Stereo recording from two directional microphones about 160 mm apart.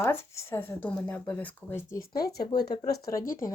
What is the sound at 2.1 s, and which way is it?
Speech, 25° left (ahead or behind).